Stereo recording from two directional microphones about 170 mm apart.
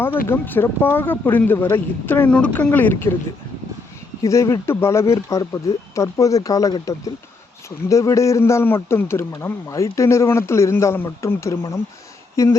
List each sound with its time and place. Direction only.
0.3 s speech: 10° left (ahead or behind)
4.2 s speech: 20° left (ahead or behind)